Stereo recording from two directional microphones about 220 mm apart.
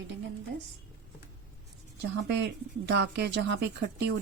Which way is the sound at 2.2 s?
50° right (ahead or behind).